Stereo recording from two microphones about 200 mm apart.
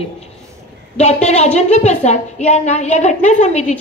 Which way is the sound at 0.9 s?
35° left (ahead or behind).